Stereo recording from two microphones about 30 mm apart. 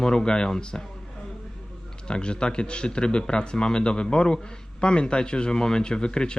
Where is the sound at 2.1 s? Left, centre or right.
Left.